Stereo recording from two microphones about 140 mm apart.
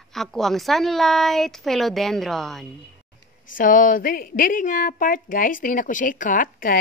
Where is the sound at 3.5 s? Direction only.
70° left (ahead or behind).